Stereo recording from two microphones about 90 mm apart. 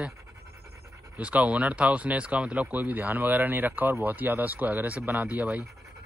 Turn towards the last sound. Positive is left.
turn(degrees=-20)  # may be behind; listen again after turning